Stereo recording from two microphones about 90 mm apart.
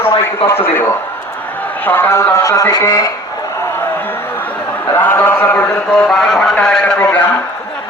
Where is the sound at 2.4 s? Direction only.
35° left (ahead or behind).